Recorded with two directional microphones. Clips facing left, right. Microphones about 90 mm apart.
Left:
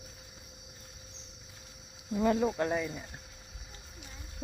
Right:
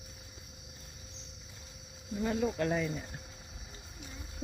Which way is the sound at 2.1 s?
85° left.